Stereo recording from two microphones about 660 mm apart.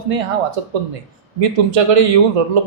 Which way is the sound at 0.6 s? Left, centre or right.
Right.